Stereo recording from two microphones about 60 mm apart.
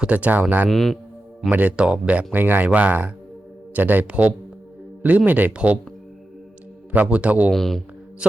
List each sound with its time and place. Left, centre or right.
0.0 s speech: right
0.7 s speech: centre
1.5 s speech: right
6.9 s speech: right
7.5 s speech: centre